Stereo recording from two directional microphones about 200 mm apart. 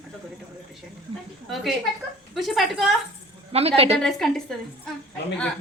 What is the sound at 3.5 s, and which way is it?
Speech, 30° right (ahead or behind).